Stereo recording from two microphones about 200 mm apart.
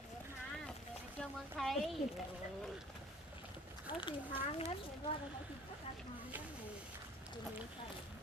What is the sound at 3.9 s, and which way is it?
Speech, 25° left (ahead or behind).